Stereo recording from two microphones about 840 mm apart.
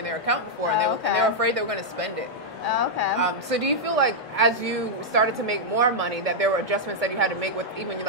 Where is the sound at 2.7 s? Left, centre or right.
Left.